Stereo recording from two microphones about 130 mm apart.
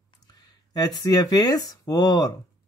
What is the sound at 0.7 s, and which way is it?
Speech, 30° left (ahead or behind).